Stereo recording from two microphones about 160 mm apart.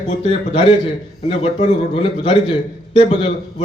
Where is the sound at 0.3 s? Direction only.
35° left (ahead or behind).